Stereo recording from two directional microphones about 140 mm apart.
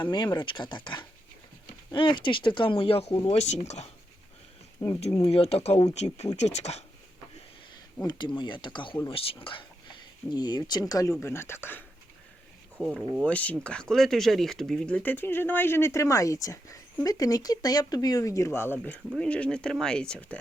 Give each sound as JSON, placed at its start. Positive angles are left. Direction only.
{"t": 0.0, "sound": "speech", "side_deg": 30}
{"t": 1.9, "sound": "speech", "side_deg": 35}
{"t": 4.8, "sound": "speech", "side_deg": 25}
{"t": 5.2, "sound": "speech", "side_deg": 45}
{"t": 8.0, "sound": "speech", "side_deg": 30}
{"t": 12.8, "sound": "speech", "side_deg": 0}
{"t": 13.2, "sound": "speech", "side_deg": 10}